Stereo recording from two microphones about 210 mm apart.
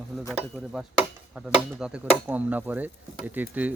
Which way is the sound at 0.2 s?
5° right (ahead or behind).